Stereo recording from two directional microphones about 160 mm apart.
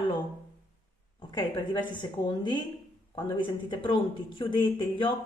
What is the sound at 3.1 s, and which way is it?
Speech, 30° left (ahead or behind).